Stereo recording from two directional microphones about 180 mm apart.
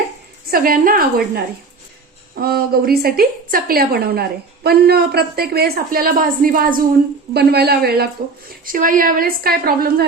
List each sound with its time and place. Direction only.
0.5 s a woman's voice: 50° right (ahead or behind)
2.3 s a woman's voice: 55° right (ahead or behind)
7.3 s a woman's voice: 65° right (ahead or behind)
8.4 s a woman's voice: 50° right (ahead or behind)